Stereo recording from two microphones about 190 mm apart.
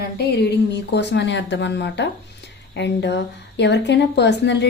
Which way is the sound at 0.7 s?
65° left (ahead or behind).